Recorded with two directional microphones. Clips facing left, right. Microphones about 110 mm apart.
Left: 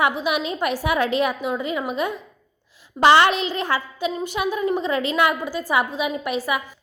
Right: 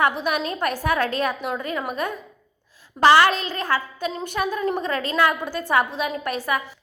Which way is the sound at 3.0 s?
20° left (ahead or behind).